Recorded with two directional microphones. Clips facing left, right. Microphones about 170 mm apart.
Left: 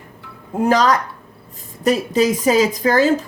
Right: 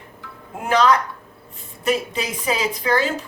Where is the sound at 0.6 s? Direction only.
40° left (ahead or behind).